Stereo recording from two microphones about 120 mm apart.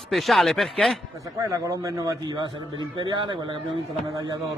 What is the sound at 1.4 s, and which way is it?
Speech, 25° right (ahead or behind).